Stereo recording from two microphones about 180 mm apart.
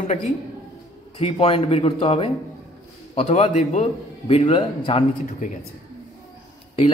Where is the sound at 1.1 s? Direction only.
30° left (ahead or behind).